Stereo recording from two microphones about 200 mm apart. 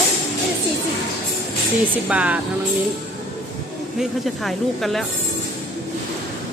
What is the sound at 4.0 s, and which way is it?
Speech, centre (ahead or behind).